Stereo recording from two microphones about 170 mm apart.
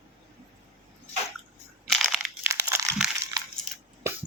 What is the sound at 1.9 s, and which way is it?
Crushing, centre (ahead or behind).